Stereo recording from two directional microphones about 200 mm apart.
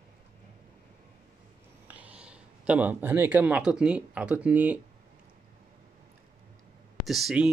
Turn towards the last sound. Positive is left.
turn(degrees=0)  # may be behind; listen again after turning